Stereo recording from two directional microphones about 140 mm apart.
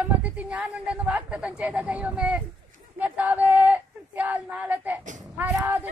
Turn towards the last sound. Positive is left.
turn(degrees=-10)  # may be behind; listen again after turning